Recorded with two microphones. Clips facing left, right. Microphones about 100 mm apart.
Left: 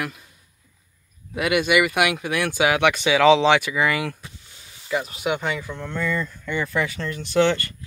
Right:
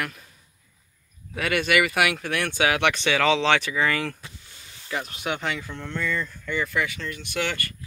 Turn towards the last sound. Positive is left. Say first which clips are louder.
# left 9 dB
turn(degrees=25)  # may be behind; listen again after turning